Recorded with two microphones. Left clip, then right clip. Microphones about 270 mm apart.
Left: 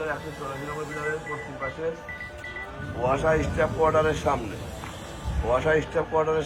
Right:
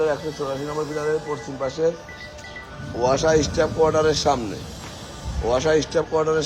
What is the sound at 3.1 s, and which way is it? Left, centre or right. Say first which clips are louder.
A man's voice: right 5 dB; centre.